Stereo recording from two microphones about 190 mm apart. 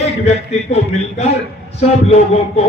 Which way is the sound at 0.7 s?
35° left (ahead or behind).